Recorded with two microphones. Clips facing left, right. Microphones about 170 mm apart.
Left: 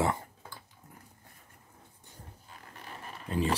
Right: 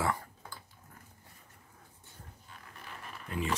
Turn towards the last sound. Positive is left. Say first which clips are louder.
# left 5 dB
turn(degrees=30)  # may be behind; listen again after turning